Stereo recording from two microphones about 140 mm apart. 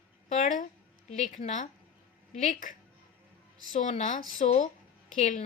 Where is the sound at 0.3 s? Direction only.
65° left (ahead or behind).